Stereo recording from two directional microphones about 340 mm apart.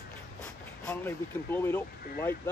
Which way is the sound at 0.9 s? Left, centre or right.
Centre.